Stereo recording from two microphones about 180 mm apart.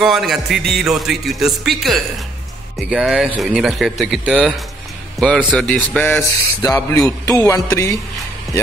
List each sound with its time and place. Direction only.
0.0 s speech: centre (ahead or behind)
6.6 s a man's voice: 15° left (ahead or behind)